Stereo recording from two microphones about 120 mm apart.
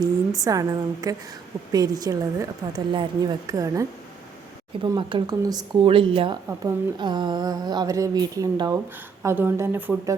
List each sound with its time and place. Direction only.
0.0 s speech: 30° right (ahead or behind)
4.8 s speech: 40° right (ahead or behind)
5.8 s speech: 45° right (ahead or behind)
6.6 s speech: 35° right (ahead or behind)
9.2 s a woman's voice: 20° right (ahead or behind)